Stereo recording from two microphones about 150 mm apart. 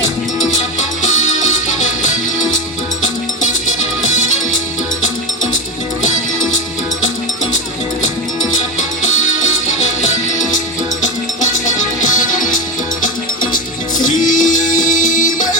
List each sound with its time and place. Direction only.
1.0 s music: 55° left (ahead or behind)
11.3 s music: 55° left (ahead or behind)